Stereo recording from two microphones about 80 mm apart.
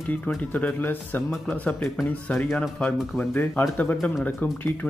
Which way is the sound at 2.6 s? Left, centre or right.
Centre.